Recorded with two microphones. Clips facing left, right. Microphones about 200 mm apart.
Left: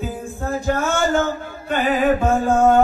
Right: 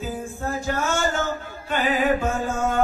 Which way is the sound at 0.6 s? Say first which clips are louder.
Left 5 dB; 55° left (ahead or behind).